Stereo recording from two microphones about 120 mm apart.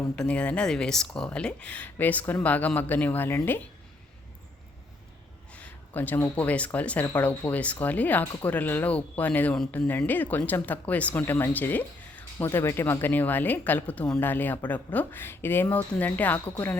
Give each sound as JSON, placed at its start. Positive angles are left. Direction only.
{"t": 0.2, "sound": "speech", "side_deg": 10}
{"t": 5.5, "sound": "speech", "side_deg": 10}